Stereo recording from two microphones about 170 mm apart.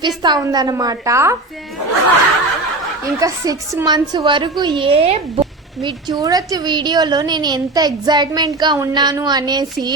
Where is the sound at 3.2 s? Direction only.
20° right (ahead or behind); by 5.9 s 35° right (ahead or behind).